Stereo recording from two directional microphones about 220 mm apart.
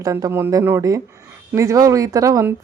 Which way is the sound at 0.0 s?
15° right (ahead or behind).